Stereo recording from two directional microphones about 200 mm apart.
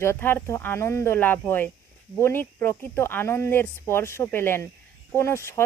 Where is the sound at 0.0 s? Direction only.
10° left (ahead or behind).